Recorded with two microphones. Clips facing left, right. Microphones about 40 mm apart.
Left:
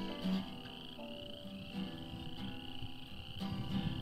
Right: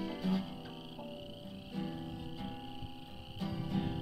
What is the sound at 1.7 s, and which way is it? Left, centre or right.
Music, centre.